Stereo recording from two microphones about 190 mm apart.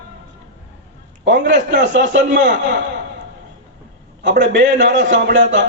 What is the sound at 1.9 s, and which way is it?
Speech, 70° right (ahead or behind).